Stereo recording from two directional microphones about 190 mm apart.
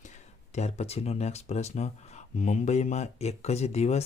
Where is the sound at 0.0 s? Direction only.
40° left (ahead or behind).